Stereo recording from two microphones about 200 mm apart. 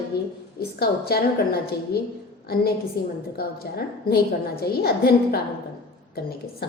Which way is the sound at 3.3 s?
50° left (ahead or behind).